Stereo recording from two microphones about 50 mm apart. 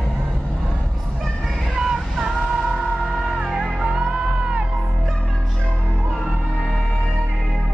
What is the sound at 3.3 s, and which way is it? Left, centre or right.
Music, centre.